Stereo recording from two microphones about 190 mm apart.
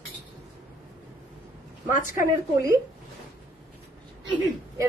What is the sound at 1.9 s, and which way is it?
Speech, 45° left (ahead or behind).